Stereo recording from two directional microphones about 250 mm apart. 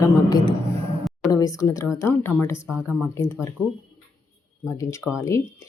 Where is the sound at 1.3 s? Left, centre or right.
Centre.